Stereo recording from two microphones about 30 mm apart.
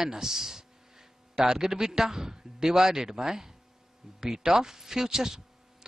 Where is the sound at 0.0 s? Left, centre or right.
Centre.